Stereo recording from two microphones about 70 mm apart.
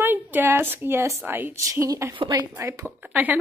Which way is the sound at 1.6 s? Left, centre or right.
Right.